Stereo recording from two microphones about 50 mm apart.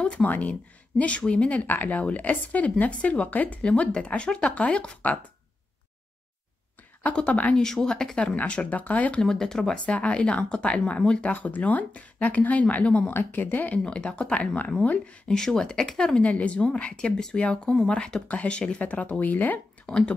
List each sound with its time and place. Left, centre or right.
0.2 s speech: left
1.7 s speech: left
7.2 s speech: left
7.5 s speech: centre
8.5 s speech: left
9.2 s speech: centre
9.8 s speech: left
11.3 s speech: left
13.1 s speech: left
13.8 s speech: centre
15.2 s speech: centre
16.2 s speech: left
19.9 s speech: centre